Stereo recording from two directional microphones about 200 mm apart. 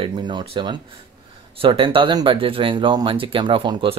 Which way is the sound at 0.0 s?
20° right (ahead or behind).